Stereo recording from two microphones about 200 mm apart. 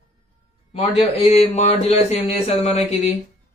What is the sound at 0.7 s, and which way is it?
A man's voice, 30° left (ahead or behind).